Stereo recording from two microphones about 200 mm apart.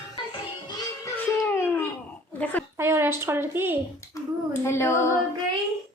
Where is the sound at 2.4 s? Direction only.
5° left (ahead or behind).